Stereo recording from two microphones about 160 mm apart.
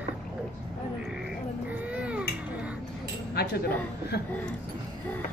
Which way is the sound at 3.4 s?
90° left.